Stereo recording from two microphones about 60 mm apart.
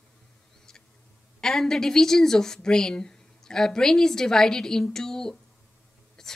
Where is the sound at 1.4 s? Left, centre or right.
Centre.